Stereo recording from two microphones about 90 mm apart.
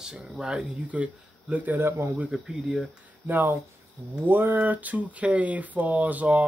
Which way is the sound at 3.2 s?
20° right (ahead or behind).